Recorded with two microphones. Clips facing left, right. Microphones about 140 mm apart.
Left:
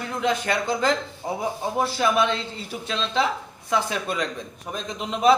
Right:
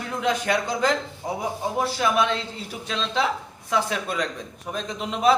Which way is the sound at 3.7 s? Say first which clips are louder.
Even; centre (ahead or behind).